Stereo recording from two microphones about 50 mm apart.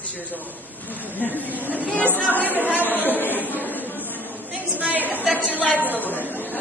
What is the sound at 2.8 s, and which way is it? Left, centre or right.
Speech, right.